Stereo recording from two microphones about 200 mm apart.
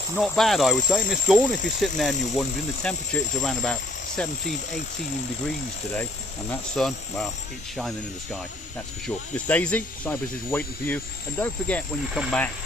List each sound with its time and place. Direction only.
0.2 s speech: centre (ahead or behind)
6.7 s speech: centre (ahead or behind)